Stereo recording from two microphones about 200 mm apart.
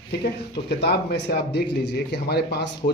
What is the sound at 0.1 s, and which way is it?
A man's voice, 55° left (ahead or behind).